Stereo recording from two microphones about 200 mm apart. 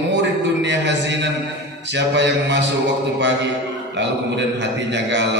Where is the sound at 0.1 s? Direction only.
60° right (ahead or behind).